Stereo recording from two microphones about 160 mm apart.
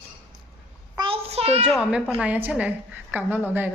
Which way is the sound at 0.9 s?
35° right (ahead or behind).